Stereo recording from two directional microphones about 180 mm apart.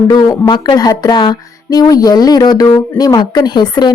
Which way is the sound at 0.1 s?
25° left (ahead or behind).